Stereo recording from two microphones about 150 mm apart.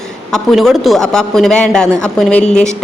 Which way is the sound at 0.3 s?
5° left (ahead or behind).